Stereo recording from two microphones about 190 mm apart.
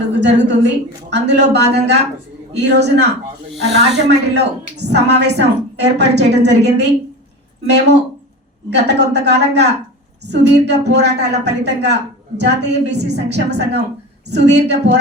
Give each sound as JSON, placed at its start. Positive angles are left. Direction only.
{"t": 0.2, "sound": "a woman's voice", "side_deg": -65}
{"t": 8.7, "sound": "a woman's voice", "side_deg": -65}